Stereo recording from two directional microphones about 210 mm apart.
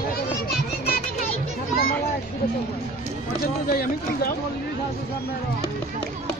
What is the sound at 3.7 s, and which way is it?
Speech, 45° left (ahead or behind).